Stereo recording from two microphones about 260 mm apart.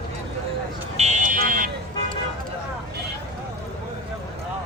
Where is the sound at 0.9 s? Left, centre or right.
Right.